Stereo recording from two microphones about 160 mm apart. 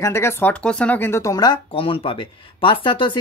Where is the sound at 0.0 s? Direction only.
15° left (ahead or behind).